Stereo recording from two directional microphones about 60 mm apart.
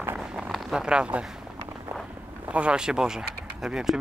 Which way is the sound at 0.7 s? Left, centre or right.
Centre.